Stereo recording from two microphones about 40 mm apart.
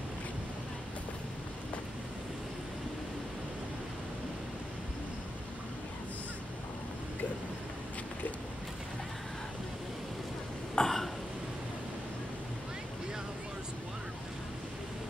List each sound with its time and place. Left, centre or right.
10.7 s throat clearing: centre